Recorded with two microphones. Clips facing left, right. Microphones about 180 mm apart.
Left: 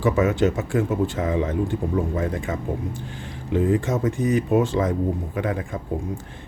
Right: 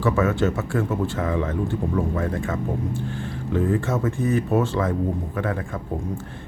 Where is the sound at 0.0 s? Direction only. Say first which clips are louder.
Left 1 dB; 15° left (ahead or behind).